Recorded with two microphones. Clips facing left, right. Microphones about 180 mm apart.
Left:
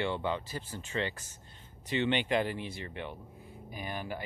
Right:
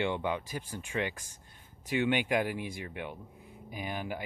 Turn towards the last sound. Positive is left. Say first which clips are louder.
# right 1 dB
turn(degrees=-15)  # may be behind; listen again after turning